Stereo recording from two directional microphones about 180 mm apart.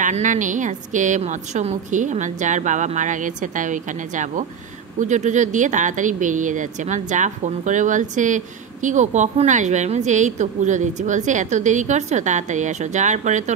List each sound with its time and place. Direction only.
0.0 s a woman's voice: 45° right (ahead or behind)